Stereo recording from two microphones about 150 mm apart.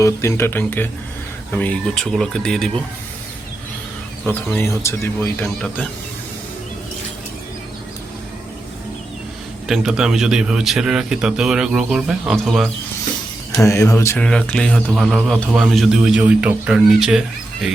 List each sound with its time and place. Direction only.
0.0 s a man's voice: 20° left (ahead or behind)
4.3 s speech: 10° left (ahead or behind)
5.5 s a man's voice: 5° left (ahead or behind)
9.6 s a man's voice: 5° right (ahead or behind)
13.7 s mantra: 20° left (ahead or behind)
14.2 s a man's voice: 5° left (ahead or behind)